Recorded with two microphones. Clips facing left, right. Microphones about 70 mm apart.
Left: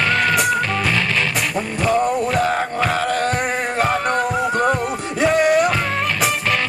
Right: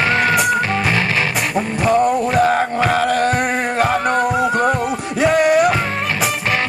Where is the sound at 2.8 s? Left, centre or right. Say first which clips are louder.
Right 3 dB; centre.